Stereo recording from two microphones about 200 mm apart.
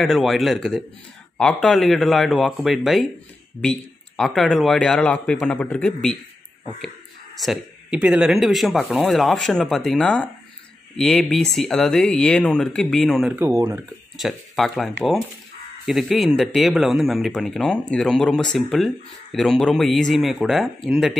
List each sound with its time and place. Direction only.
0.0 s speech: centre (ahead or behind)
7.3 s speech: centre (ahead or behind)
13.4 s speech: 15° right (ahead or behind)
14.1 s speech: centre (ahead or behind)